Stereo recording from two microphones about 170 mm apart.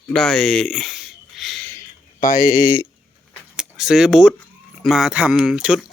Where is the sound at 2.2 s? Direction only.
50° left (ahead or behind).